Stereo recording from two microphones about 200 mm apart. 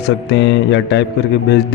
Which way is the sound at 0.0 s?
65° left (ahead or behind).